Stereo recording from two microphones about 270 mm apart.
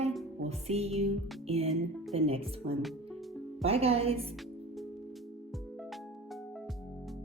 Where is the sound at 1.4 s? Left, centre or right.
Right.